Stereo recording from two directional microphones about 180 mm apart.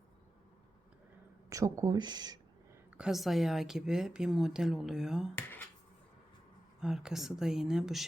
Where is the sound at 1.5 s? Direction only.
20° right (ahead or behind).